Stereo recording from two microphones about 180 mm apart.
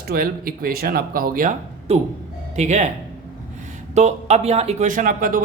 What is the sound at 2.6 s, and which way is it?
Speech, 40° right (ahead or behind).